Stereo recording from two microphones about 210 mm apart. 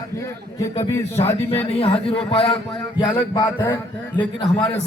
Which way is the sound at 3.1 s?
15° left (ahead or behind).